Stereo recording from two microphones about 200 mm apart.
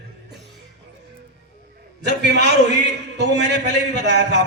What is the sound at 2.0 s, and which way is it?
A man's voice, 60° right (ahead or behind).